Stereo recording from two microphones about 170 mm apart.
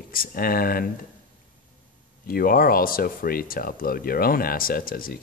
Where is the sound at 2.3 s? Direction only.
60° left (ahead or behind).